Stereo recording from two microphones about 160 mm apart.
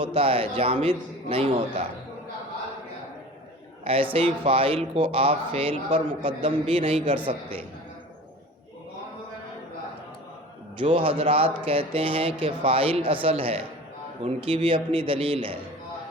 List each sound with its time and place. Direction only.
0.0 s speech: 35° right (ahead or behind)
3.8 s speech: 35° right (ahead or behind)
10.8 s speech: 35° right (ahead or behind)